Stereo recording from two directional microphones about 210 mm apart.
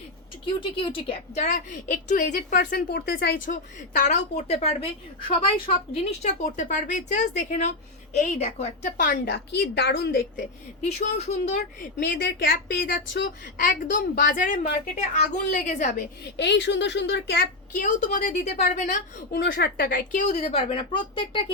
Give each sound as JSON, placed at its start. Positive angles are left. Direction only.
{"t": 0.4, "sound": "a woman's voice", "side_deg": 25}
{"t": 9.2, "sound": "a woman's voice", "side_deg": 55}
{"t": 10.8, "sound": "a woman's voice", "side_deg": 30}
{"t": 16.4, "sound": "speech", "side_deg": 55}
{"t": 17.7, "sound": "a woman's voice", "side_deg": 40}